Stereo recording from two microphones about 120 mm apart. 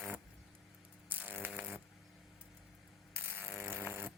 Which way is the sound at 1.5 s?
10° right (ahead or behind).